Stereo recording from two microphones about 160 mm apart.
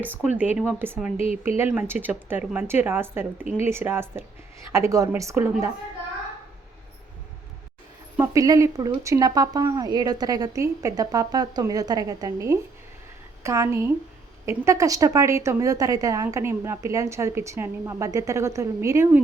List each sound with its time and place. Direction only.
0.0 s a woman's voice: 10° right (ahead or behind)
8.2 s a woman's voice: 20° right (ahead or behind)